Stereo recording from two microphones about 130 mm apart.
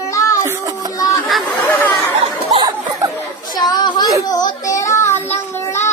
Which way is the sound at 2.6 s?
30° right (ahead or behind).